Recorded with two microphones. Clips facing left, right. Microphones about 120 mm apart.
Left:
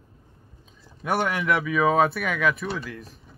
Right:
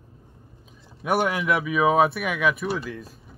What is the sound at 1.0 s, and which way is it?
Speech, 10° right (ahead or behind).